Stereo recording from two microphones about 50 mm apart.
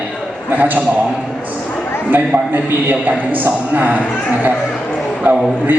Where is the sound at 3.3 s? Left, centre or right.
Right.